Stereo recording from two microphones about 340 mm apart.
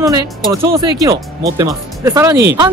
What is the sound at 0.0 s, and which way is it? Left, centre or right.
Speech, centre.